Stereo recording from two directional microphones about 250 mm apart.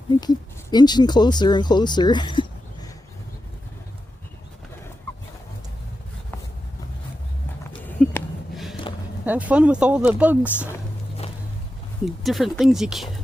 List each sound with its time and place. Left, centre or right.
0.2 s speech: centre
7.9 s a sound: centre
9.2 s speech: centre
12.0 s speech: centre